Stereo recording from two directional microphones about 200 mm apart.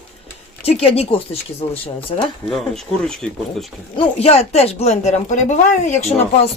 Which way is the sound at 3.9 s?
30° left (ahead or behind).